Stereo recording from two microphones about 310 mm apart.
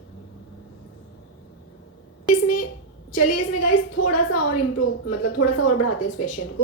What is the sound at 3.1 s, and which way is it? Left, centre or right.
Speech, left.